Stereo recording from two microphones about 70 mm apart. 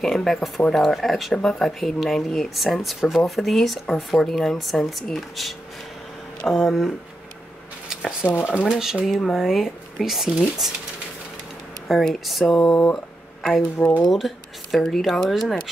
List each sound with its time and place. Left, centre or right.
0.0 s speech: centre
8.2 s speech: left
8.6 s speech: centre
11.9 s speech: centre
14.0 s speech: centre